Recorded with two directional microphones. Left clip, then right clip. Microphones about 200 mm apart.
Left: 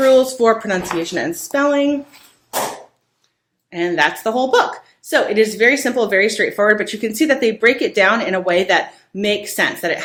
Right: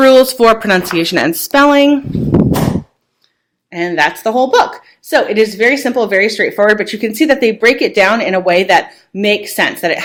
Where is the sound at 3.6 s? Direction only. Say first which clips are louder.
Right 3 dB; 15° right (ahead or behind).